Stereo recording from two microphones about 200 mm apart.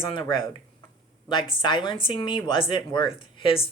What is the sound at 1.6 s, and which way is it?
Speech, 20° left (ahead or behind).